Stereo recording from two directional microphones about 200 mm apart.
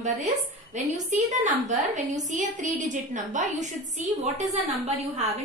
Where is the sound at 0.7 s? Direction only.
35° right (ahead or behind).